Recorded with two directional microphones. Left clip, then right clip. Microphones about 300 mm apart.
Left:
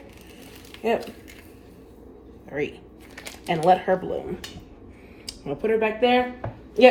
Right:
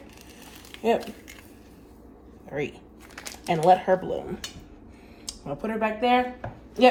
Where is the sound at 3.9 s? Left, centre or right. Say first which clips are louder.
Even; right.